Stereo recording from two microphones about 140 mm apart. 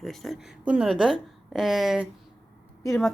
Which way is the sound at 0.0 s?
Centre (ahead or behind).